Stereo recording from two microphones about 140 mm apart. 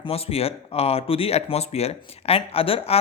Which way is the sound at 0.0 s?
45° left (ahead or behind).